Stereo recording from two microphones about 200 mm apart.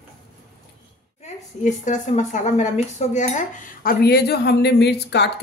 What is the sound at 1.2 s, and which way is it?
A woman's voice, 35° left (ahead or behind).